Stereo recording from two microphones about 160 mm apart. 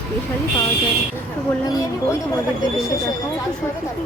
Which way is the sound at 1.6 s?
25° left (ahead or behind).